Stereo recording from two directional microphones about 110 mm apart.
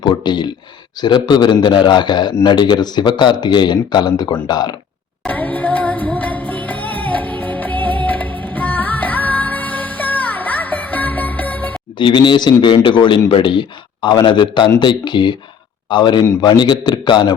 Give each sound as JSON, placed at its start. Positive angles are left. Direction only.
{"t": 0.0, "sound": "speech", "side_deg": 40}
{"t": 5.2, "sound": "music", "side_deg": 15}
{"t": 11.9, "sound": "speech", "side_deg": 45}